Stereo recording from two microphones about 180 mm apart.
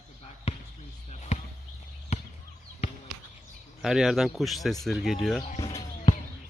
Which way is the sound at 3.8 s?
Centre (ahead or behind).